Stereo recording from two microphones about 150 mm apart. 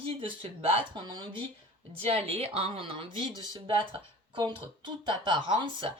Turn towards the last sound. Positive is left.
turn(degrees=-35)  # may be behind; listen again after turning